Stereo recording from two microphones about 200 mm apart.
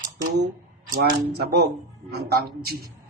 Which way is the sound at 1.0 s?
55° right (ahead or behind).